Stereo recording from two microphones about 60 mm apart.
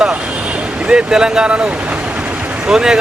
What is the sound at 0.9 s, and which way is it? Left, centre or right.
Speech, centre.